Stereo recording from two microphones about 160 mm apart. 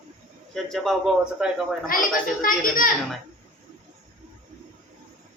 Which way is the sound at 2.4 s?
60° left (ahead or behind).